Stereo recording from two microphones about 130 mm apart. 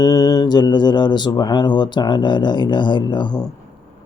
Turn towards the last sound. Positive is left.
turn(degrees=35)  # may be behind; listen again after turning